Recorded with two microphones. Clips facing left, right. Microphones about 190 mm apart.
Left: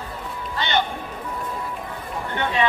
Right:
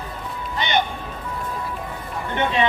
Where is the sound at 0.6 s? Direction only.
15° right (ahead or behind).